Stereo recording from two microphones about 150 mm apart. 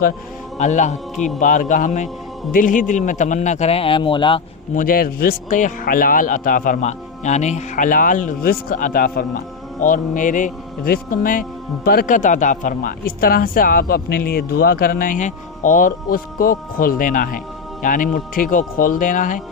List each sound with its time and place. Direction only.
0.6 s a man's voice: 50° left (ahead or behind); by 4.4 s 35° left (ahead or behind)
4.7 s speech: 65° left (ahead or behind)
9.8 s speech: 60° left (ahead or behind)